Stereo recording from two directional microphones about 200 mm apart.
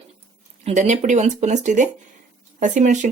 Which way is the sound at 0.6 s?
35° right (ahead or behind).